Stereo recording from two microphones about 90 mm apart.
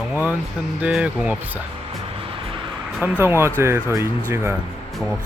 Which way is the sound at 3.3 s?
30° right (ahead or behind).